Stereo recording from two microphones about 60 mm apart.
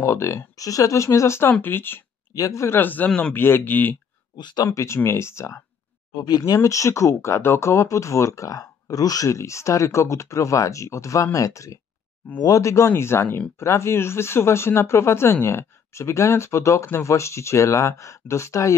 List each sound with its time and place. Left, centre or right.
0.0 s speech: left
1.5 s speech: left
2.3 s speech: left
2.8 s speech: left
4.6 s speech: left
6.2 s speech: left
7.7 s speech: left